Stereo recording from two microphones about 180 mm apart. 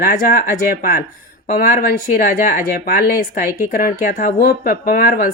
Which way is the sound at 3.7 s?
55° left (ahead or behind).